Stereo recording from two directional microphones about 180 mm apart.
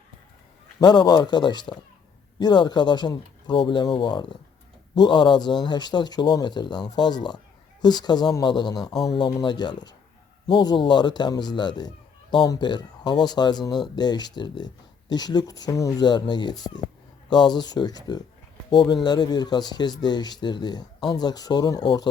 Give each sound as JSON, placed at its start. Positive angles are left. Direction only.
{"t": 0.8, "sound": "speech", "side_deg": 25}
{"t": 8.8, "sound": "speech", "side_deg": 0}
{"t": 9.0, "sound": "speech", "side_deg": 25}
{"t": 13.7, "sound": "speech", "side_deg": 0}
{"t": 13.9, "sound": "speech", "side_deg": 25}